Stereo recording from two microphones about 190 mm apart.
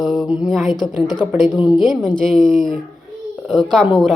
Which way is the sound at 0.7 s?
25° left (ahead or behind).